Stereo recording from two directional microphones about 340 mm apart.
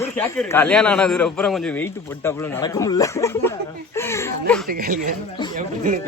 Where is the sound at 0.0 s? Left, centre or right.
Centre.